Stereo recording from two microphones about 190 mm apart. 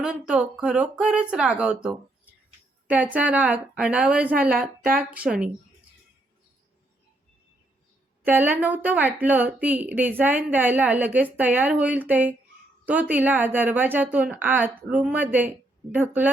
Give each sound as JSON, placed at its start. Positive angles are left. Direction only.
{"t": 0.0, "sound": "a woman's voice", "side_deg": -5}
{"t": 8.2, "sound": "a woman's voice", "side_deg": -10}